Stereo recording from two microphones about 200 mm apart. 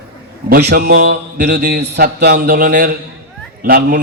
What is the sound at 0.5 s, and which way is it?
A man's voice, 55° right (ahead or behind).